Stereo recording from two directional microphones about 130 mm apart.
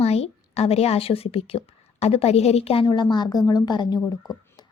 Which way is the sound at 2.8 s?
35° left (ahead or behind).